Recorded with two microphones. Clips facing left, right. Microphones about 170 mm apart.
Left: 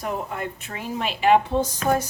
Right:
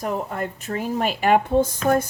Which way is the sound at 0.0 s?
45° right (ahead or behind).